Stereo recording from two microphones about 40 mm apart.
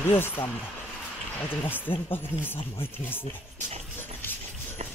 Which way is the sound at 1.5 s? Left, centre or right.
Left.